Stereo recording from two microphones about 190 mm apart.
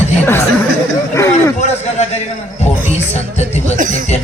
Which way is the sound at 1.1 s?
15° left (ahead or behind).